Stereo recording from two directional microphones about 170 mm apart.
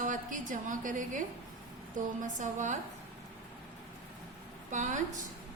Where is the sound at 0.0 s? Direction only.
50° right (ahead or behind).